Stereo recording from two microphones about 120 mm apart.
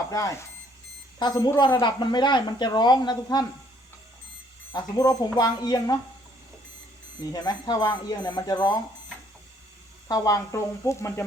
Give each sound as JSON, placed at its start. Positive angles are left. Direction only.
{"t": 0.1, "sound": "speech", "side_deg": 25}
{"t": 1.2, "sound": "speech", "side_deg": 40}
{"t": 4.7, "sound": "speech", "side_deg": 35}
{"t": 7.2, "sound": "speech", "side_deg": 35}
{"t": 10.1, "sound": "speech", "side_deg": 30}